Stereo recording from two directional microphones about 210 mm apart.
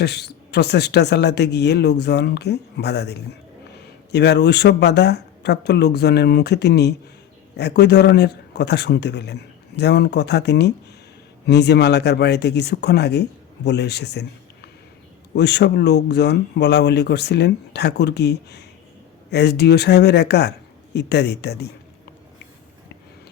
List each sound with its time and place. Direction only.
0.0 s speech: 50° left (ahead or behind)
15.4 s speech: 55° left (ahead or behind)